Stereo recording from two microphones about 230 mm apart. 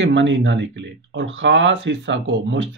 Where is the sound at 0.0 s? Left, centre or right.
Right.